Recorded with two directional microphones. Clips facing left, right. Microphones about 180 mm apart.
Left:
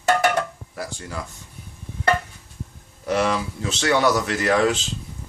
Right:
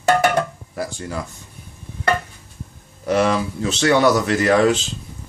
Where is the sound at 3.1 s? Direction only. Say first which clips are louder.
Right 4 dB; 55° right (ahead or behind).